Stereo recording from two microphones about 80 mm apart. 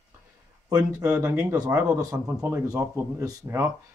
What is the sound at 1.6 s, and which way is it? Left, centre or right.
Speech, right.